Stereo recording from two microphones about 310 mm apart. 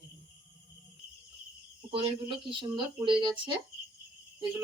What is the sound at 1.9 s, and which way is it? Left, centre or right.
Speech, centre.